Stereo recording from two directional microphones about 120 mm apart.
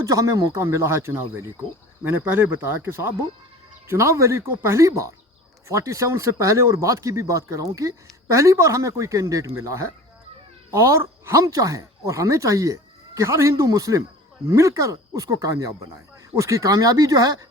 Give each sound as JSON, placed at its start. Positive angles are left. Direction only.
{"t": 0.0, "sound": "speech", "side_deg": -30}